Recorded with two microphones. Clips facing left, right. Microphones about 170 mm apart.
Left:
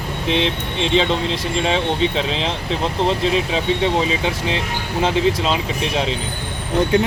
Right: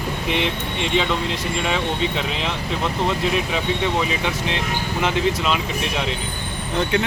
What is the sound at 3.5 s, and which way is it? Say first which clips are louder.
Speech: left 3 dB; 25° left (ahead or behind).